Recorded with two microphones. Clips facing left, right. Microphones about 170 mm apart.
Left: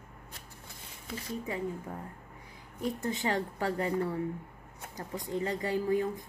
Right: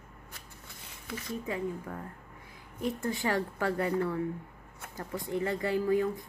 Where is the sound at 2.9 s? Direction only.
20° left (ahead or behind).